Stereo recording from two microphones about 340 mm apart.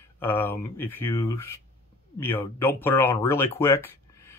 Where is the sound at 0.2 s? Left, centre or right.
Centre.